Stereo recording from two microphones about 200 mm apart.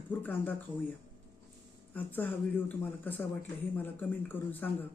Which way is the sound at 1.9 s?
10° left (ahead or behind).